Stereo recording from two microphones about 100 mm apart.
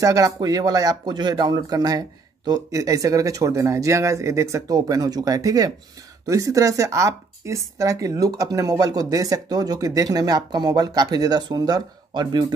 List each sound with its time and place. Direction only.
0.0 s a woman's voice: 35° right (ahead or behind)